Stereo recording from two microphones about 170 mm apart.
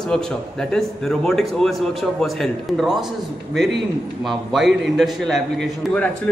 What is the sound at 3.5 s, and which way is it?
Speech, 90° right.